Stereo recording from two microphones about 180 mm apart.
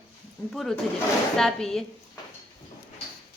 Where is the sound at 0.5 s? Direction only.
Centre (ahead or behind).